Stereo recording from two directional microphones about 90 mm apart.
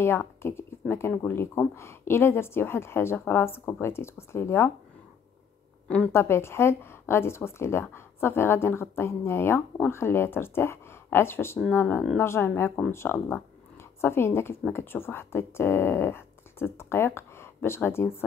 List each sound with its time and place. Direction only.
0.0 s a woman's voice: 30° left (ahead or behind)
6.1 s speech: 30° left (ahead or behind)